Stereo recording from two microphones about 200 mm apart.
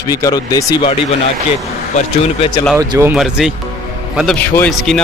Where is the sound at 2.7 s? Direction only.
15° right (ahead or behind).